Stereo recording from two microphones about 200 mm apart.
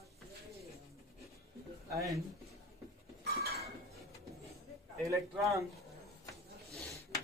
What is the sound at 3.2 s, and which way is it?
Dishes, 50° right (ahead or behind).